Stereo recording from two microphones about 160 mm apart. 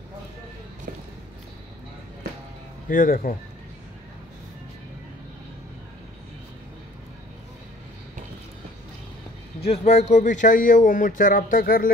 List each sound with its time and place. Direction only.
2.9 s a man's voice: 60° left (ahead or behind)
9.7 s a man's voice: 40° left (ahead or behind); by 11.9 s 65° left (ahead or behind)